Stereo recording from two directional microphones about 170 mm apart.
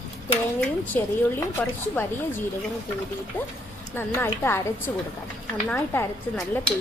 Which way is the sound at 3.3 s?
10° left (ahead or behind).